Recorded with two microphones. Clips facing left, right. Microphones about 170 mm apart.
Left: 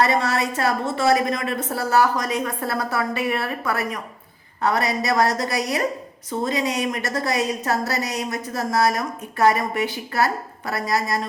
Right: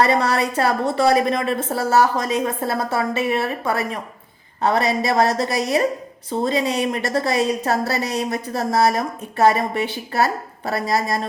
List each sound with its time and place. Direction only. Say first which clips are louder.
0.0 s a woman's voice: right 3 dB; 35° right (ahead or behind)